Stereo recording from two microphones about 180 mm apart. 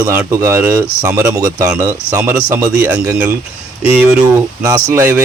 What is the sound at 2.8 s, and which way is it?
Speech, 10° right (ahead or behind).